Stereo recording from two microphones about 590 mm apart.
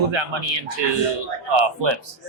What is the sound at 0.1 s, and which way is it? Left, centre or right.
Speech, right.